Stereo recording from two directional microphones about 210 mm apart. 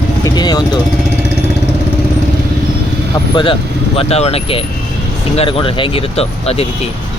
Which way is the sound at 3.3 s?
25° left (ahead or behind).